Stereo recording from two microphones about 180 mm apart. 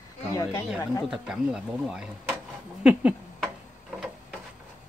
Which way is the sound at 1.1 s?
5° right (ahead or behind).